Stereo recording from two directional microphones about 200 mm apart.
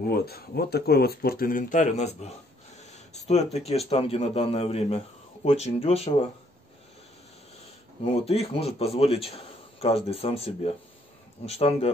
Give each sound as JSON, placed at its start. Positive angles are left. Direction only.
{"t": 0.0, "sound": "speech", "side_deg": 50}
{"t": 3.5, "sound": "a man's voice", "side_deg": 30}
{"t": 8.0, "sound": "a man's voice", "side_deg": 30}